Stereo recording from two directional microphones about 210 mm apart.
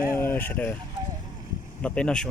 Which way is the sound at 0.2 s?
10° left (ahead or behind).